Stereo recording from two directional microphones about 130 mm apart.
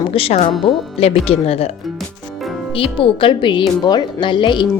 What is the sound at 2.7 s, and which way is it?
Speech, 45° left (ahead or behind).